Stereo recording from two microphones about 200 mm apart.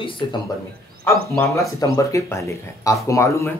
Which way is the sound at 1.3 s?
15° left (ahead or behind).